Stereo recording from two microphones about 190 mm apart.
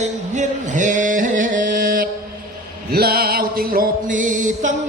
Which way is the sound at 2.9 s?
55° right (ahead or behind).